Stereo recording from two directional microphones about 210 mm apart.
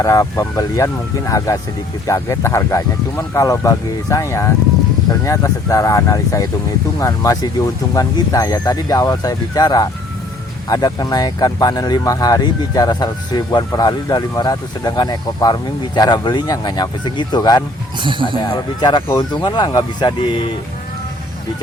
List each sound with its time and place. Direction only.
0.0 s speech: 15° left (ahead or behind)
18.0 s speech: 25° right (ahead or behind)
18.4 s speech: 20° left (ahead or behind)